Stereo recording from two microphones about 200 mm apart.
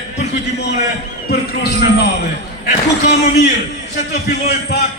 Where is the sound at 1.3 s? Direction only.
55° left (ahead or behind).